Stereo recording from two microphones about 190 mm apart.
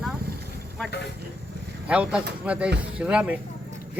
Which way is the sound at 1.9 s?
5° right (ahead or behind).